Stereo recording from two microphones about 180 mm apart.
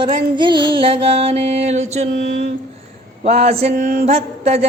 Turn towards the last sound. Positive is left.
turn(degrees=-35)  # may be behind; listen again after turning